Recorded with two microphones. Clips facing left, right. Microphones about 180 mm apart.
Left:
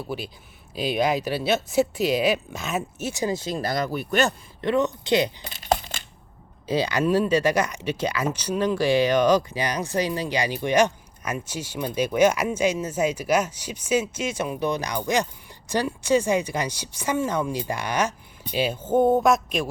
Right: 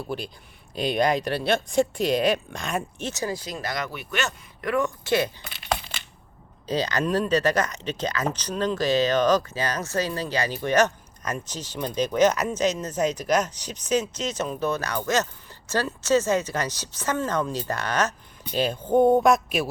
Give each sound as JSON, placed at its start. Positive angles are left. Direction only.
{"t": 0.0, "sound": "speech", "side_deg": 5}
{"t": 5.4, "sound": "crumpling", "side_deg": 45}
{"t": 6.7, "sound": "speech", "side_deg": 10}